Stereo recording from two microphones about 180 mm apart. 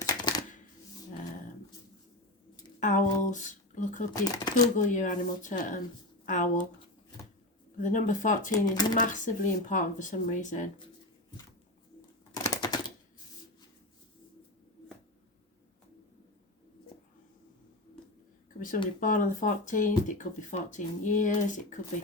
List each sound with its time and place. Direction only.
0.0 s a sound: 20° left (ahead or behind)
2.8 s a sound: 45° left (ahead or behind)
4.1 s speech: 20° left (ahead or behind)
4.8 s speech: 45° left (ahead or behind)
7.8 s speech: 45° left (ahead or behind)
8.5 s speech: 20° left (ahead or behind)
9.0 s speech: 45° left (ahead or behind)
12.3 s typewriter: 20° left (ahead or behind)
18.9 s speech: 45° left (ahead or behind)